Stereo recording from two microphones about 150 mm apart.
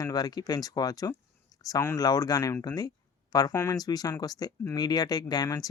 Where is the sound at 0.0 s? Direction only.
25° left (ahead or behind).